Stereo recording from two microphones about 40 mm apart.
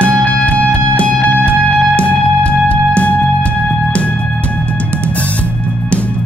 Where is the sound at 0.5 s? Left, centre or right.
Left.